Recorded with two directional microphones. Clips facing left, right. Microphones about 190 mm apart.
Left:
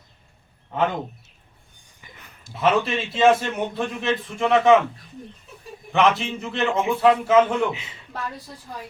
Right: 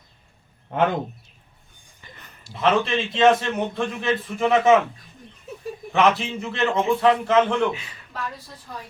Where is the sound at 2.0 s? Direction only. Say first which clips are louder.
Right 1 dB; 5° left (ahead or behind).